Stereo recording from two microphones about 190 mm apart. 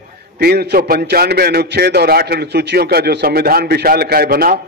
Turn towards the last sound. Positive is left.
turn(degrees=-50)  # may be behind; listen again after turning